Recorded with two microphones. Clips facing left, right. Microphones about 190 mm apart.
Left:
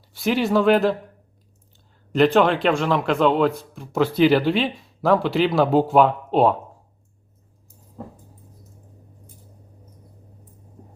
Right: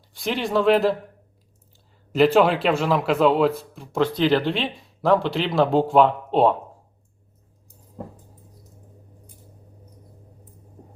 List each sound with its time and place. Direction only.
0.1 s speech: 5° left (ahead or behind)
2.1 s speech: 5° right (ahead or behind)